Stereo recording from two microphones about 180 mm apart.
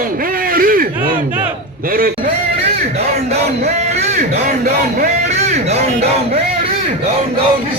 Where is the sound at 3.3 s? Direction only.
40° right (ahead or behind).